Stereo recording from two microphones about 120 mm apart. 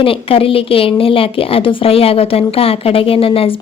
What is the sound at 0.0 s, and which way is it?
Speech, 50° left (ahead or behind).